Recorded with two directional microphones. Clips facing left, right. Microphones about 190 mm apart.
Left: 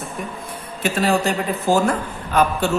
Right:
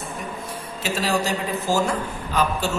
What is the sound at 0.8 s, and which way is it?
A man's voice, 55° left (ahead or behind).